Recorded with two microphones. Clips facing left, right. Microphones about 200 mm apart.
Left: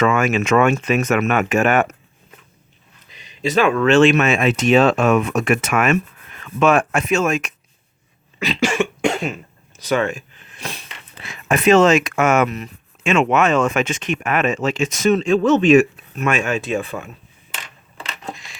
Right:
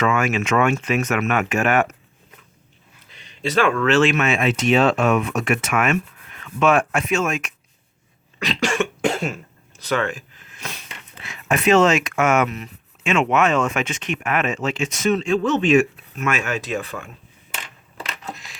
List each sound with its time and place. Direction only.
0.3 s speech: 40° left (ahead or behind)
3.1 s a sound: 15° left (ahead or behind)
4.1 s speech: 40° left (ahead or behind)
8.4 s cough: centre (ahead or behind)
9.8 s speech: 15° left (ahead or behind)
10.5 s a sound: 30° left (ahead or behind)
11.2 s speech: 35° left (ahead or behind)